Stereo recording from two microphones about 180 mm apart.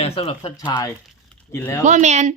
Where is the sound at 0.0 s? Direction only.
30° left (ahead or behind); by 1.8 s 10° left (ahead or behind).